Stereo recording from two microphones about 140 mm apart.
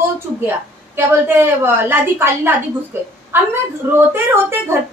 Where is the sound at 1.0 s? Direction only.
15° right (ahead or behind).